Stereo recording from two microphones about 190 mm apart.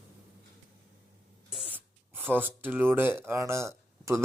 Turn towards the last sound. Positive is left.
turn(degrees=-15)  # may be behind; listen again after turning